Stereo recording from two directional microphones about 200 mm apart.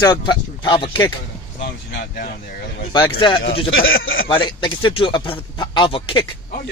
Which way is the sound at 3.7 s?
80° left.